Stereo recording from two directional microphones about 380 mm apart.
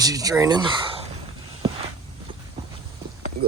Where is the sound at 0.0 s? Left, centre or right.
Centre.